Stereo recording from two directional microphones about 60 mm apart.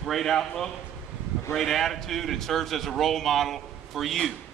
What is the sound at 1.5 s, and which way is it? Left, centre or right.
A man's voice, centre.